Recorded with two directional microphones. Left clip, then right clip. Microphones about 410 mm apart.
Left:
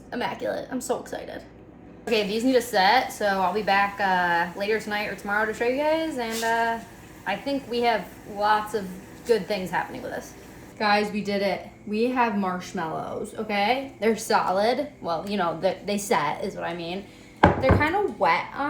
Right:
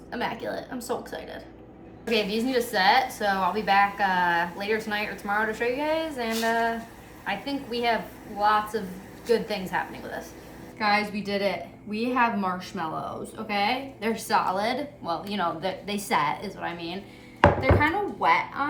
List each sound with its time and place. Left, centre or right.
0.1 s a woman's voice: centre